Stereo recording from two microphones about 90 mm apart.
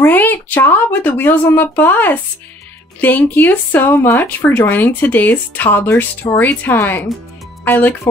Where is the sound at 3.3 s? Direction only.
20° left (ahead or behind).